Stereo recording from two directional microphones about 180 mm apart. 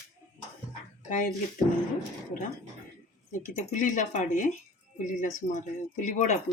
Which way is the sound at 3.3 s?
45° left (ahead or behind).